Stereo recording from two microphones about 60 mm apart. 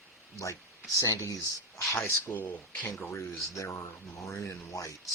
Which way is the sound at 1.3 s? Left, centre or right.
Left.